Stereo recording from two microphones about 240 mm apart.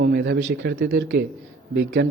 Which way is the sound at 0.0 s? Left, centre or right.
Right.